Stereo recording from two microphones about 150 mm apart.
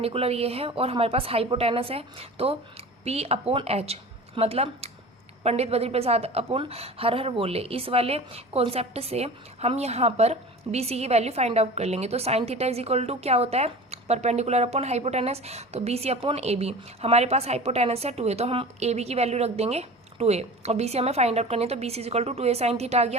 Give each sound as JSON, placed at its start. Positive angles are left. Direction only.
{"t": 0.0, "sound": "a woman's voice", "side_deg": -40}